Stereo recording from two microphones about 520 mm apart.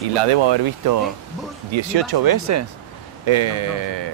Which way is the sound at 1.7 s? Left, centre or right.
Right.